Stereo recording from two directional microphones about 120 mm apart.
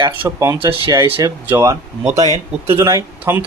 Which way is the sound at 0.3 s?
20° right (ahead or behind).